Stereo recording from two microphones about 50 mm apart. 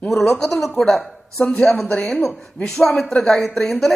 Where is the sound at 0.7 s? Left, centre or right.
Centre.